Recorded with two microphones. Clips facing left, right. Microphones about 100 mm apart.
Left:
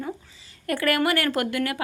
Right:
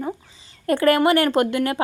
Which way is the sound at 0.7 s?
30° right (ahead or behind).